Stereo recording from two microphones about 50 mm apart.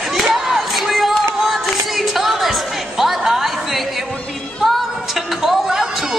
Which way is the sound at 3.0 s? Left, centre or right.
Centre.